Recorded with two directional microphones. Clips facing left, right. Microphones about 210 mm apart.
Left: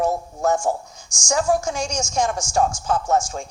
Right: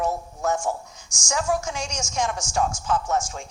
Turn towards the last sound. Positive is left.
turn(degrees=45)  # may be behind; listen again after turning